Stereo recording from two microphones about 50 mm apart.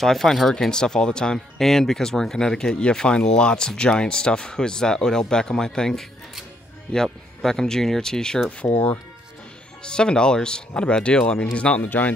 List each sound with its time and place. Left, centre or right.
0.0 s speech: centre
9.8 s speech: centre
11.8 s speech: left